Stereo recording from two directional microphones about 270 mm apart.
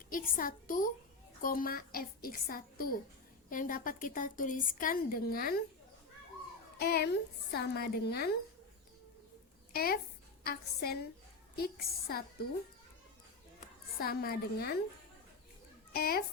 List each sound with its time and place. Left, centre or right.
0.1 s a woman's voice: left
6.7 s a woman's voice: left
9.7 s a woman's voice: left
14.0 s a woman's voice: left
15.9 s a woman's voice: left